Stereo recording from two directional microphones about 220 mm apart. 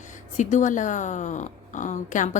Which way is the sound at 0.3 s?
35° left (ahead or behind).